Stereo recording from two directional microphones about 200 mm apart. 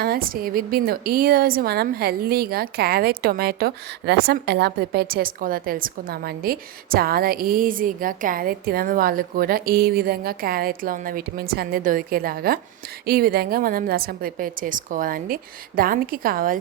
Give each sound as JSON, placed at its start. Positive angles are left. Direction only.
{"t": 0.0, "sound": "a woman's voice", "side_deg": -50}